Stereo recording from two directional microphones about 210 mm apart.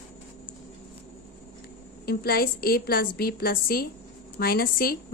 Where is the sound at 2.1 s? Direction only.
45° left (ahead or behind).